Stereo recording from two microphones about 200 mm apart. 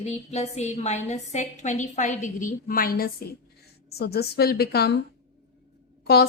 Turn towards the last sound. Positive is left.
turn(degrees=55)  # may be behind; listen again after turning